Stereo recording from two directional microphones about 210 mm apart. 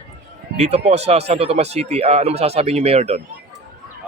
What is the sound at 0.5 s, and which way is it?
Speech, 30° right (ahead or behind).